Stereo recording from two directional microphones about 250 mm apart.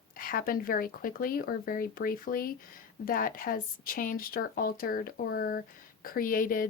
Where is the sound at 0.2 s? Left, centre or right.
Left.